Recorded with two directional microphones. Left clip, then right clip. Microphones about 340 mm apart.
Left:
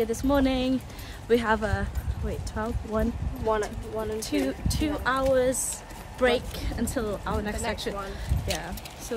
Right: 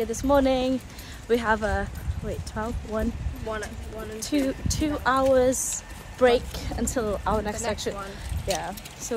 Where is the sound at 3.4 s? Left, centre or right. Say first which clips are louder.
Left 6 dB; centre.